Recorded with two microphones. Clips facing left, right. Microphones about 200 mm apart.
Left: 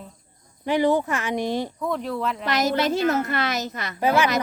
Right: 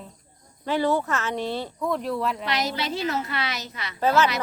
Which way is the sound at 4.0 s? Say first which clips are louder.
Even; 15° left (ahead or behind).